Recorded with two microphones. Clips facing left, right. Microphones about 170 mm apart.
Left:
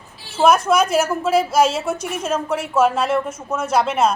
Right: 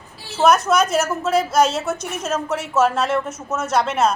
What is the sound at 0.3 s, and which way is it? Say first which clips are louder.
A woman's voice: left 1 dB; 5° left (ahead or behind).